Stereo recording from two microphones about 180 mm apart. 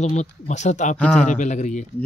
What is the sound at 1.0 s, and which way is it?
Speech, 5° left (ahead or behind).